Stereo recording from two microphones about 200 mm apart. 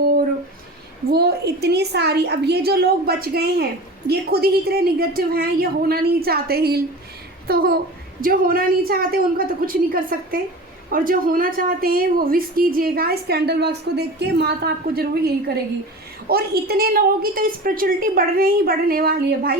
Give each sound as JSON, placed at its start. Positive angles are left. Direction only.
{"t": 1.1, "sound": "a woman's voice", "side_deg": -55}